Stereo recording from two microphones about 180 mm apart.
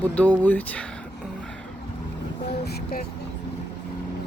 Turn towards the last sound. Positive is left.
turn(degrees=55)  # may be behind; listen again after turning